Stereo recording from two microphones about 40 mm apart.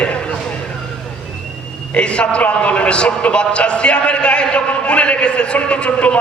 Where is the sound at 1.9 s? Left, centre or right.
Left.